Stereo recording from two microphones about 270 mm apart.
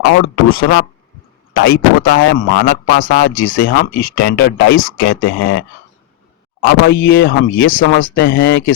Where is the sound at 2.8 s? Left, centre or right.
Left.